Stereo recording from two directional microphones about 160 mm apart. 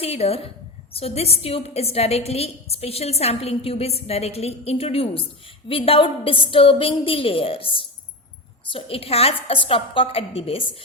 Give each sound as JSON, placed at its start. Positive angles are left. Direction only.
{"t": 0.0, "sound": "a woman's voice", "side_deg": 40}